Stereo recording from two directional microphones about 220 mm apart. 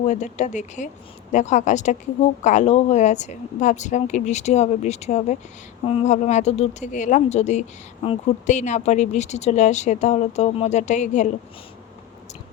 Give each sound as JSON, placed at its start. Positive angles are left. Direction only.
{"t": 0.1, "sound": "speech", "side_deg": 30}